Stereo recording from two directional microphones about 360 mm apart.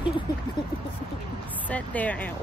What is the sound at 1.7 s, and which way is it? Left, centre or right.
Speech, centre.